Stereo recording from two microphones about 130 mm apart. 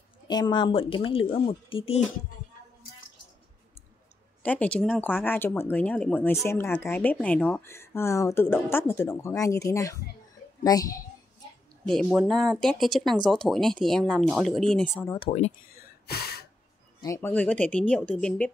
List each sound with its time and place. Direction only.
0.3 s speech: 35° left (ahead or behind)
4.4 s speech: 10° left (ahead or behind); by 11.0 s 30° left (ahead or behind)
11.8 s speech: 5° left (ahead or behind)
15.1 s speech: 45° left (ahead or behind)
17.0 s speech: 25° left (ahead or behind)
17.3 s speech: 10° left (ahead or behind)